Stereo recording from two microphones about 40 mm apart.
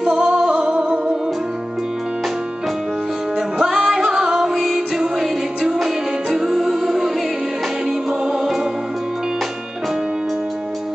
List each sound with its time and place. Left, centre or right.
0.0 s music: centre
0.5 s music: right
3.3 s music: centre